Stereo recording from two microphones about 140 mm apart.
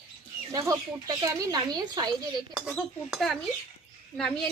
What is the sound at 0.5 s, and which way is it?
Speech, 25° right (ahead or behind).